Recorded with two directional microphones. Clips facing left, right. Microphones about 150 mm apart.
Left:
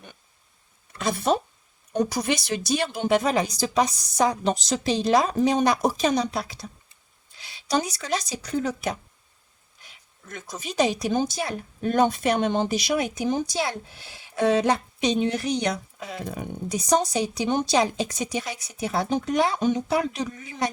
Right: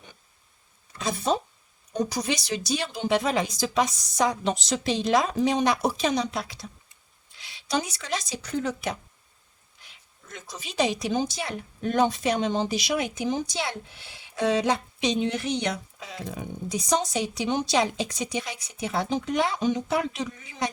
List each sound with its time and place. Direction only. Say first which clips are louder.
0.9 s speech: left 3 dB; 60° left (ahead or behind)
10.3 s speech: left 3 dB; 45° left (ahead or behind)